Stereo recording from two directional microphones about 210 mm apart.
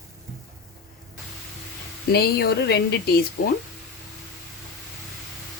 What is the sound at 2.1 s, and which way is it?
Speech, 50° left (ahead or behind).